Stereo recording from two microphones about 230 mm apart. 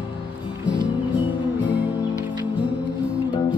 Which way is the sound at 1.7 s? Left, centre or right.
Centre.